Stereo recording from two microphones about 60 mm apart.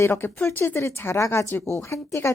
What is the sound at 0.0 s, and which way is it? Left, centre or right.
Speech, left.